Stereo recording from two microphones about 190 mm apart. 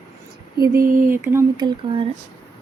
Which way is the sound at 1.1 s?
10° right (ahead or behind).